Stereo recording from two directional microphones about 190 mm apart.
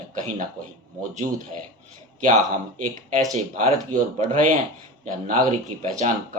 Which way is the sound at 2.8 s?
40° right (ahead or behind).